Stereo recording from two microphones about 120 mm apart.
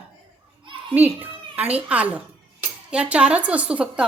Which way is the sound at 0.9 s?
15° right (ahead or behind).